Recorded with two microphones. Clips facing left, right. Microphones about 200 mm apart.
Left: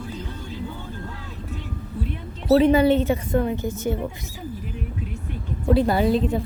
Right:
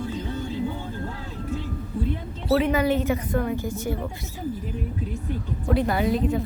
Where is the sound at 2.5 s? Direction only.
30° left (ahead or behind).